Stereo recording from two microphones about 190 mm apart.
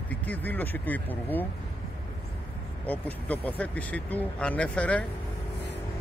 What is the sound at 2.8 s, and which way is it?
Speech, 10° left (ahead or behind).